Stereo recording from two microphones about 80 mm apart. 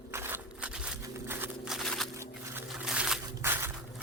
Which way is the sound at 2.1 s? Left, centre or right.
Right.